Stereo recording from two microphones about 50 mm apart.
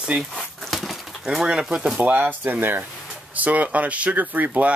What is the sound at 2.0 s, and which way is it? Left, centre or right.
Speech, right.